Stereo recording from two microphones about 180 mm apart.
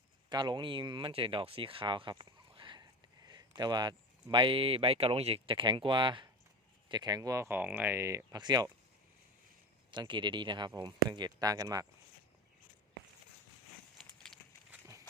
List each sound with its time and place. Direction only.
0.3 s speech: 25° right (ahead or behind)
9.9 s speech: 25° right (ahead or behind)
14.7 s a sound: 15° right (ahead or behind)